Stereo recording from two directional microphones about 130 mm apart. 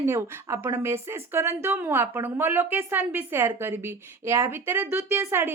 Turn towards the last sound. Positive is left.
turn(degrees=-20)  # may be behind; listen again after turning